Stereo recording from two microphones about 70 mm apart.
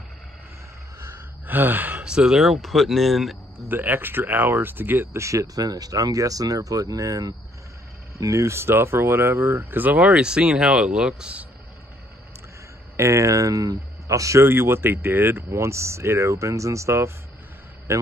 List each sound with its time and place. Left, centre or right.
1.0 s gasp: right
2.0 s speech: centre
3.6 s speech: right
5.1 s speech: right; by 11.4 s centre
12.9 s a man's voice: right
14.4 s speech: right